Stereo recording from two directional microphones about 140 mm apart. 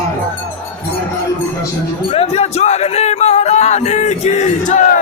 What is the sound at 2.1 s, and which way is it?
Speech, 45° left (ahead or behind).